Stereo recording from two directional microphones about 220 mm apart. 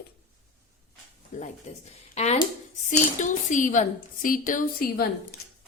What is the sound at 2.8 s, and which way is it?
A woman's voice, 35° left (ahead or behind).